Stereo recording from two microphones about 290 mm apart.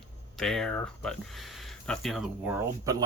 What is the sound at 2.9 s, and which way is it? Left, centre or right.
Speech, centre.